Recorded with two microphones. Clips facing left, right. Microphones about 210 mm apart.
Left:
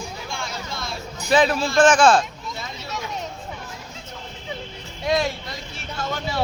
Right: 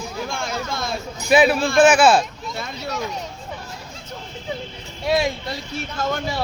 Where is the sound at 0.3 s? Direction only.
45° right (ahead or behind).